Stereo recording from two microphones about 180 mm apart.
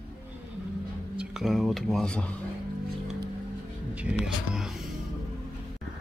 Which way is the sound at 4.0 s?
5° right (ahead or behind).